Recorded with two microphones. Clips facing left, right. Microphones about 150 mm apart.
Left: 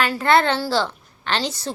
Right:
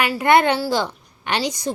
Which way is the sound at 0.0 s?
10° right (ahead or behind).